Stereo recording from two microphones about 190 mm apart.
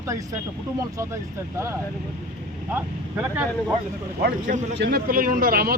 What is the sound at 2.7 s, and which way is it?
Speech, 10° right (ahead or behind).